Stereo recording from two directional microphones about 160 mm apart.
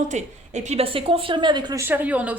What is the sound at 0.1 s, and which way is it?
Speech, 45° right (ahead or behind).